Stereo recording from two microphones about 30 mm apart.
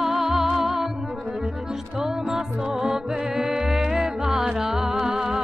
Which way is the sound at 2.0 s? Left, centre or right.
Centre.